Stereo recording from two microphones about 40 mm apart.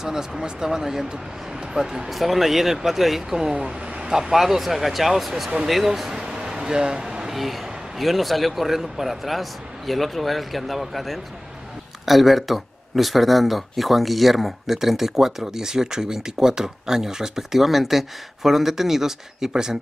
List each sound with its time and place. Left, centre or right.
0.0 s speech: centre
6.1 s a sound: centre
7.3 s a man's voice: centre